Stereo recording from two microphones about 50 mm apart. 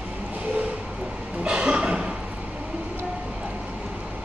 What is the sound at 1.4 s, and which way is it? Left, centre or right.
Cough, centre.